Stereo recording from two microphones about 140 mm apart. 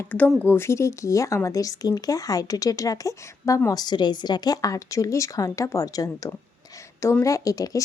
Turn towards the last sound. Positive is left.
turn(degrees=25)  # may be behind; listen again after turning